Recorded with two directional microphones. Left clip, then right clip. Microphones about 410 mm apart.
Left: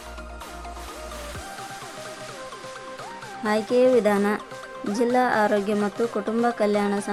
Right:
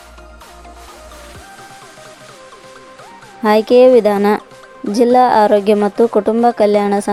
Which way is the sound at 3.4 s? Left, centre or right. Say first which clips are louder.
Right 12 dB; centre.